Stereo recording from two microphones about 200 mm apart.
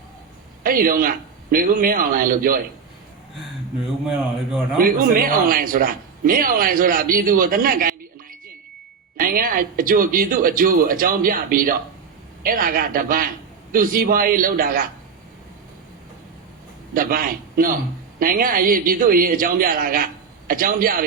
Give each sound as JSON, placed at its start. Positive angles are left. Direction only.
{"t": 0.6, "sound": "speech", "side_deg": -45}
{"t": 4.8, "sound": "a man's voice", "side_deg": -45}
{"t": 16.9, "sound": "speech", "side_deg": -45}